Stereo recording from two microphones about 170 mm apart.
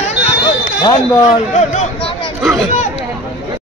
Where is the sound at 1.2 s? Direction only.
45° left (ahead or behind).